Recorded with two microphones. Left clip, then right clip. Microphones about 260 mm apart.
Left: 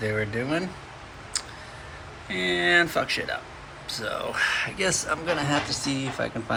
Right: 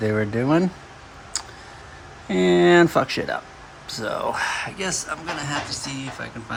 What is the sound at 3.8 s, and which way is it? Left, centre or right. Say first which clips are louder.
Speech: right 5 dB; right.